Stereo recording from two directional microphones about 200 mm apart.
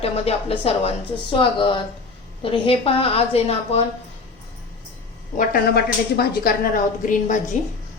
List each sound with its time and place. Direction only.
0.0 s a woman's voice: 30° left (ahead or behind)
5.4 s a woman's voice: 50° left (ahead or behind); by 7.7 s 35° left (ahead or behind)